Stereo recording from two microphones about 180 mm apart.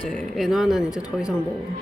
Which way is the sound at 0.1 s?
Centre (ahead or behind).